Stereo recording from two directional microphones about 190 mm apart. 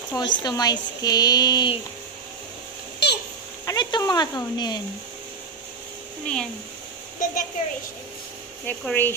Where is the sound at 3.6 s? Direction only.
20° left (ahead or behind).